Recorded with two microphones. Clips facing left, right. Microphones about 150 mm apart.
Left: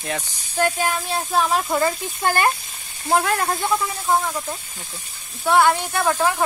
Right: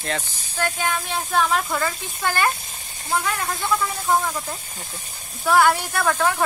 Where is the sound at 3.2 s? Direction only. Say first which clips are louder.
Left 4 dB; 45° left (ahead or behind).